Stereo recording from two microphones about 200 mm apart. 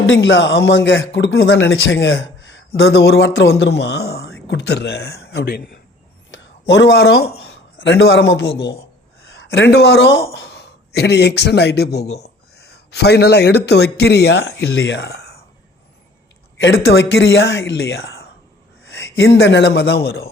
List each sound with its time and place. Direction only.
0.1 s a man's voice: 65° left (ahead or behind)
6.3 s speech: 65° left (ahead or behind)
7.5 s a man's voice: 75° left (ahead or behind)
9.4 s speech: 70° left (ahead or behind)
12.0 s speech: 30° left (ahead or behind)
12.5 s speech: 55° left (ahead or behind)
16.6 s a man's voice: 60° left (ahead or behind)